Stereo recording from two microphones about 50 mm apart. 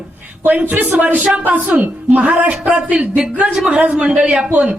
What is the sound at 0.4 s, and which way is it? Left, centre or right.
A woman's voice, right.